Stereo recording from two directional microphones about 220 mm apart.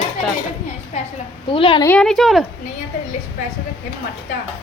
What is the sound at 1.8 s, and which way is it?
Speech, 5° left (ahead or behind).